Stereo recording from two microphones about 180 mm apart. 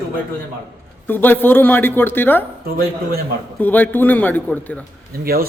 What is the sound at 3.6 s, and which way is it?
A man's voice, 10° left (ahead or behind).